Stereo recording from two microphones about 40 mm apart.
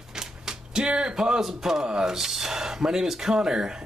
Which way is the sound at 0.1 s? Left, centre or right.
Centre.